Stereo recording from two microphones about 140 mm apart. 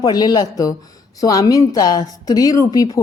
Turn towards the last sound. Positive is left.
turn(degrees=25)  # may be behind; listen again after turning